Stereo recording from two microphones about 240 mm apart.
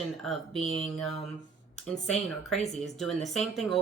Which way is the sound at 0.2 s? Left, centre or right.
Centre.